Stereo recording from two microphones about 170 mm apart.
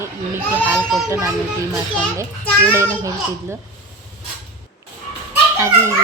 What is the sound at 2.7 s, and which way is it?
Speech, 15° right (ahead or behind).